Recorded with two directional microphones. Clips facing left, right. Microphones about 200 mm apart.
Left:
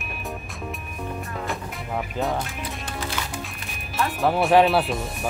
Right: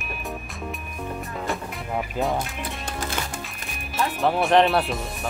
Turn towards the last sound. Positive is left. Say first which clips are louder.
# left 1 dB
turn(degrees=0)  # may be behind; listen again after turning